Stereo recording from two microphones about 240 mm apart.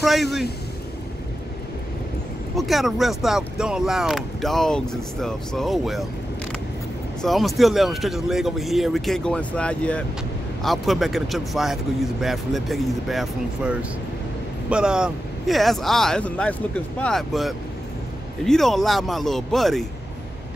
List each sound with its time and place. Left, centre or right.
0.0 s a man's voice: centre
2.5 s speech: centre
7.2 s speech: centre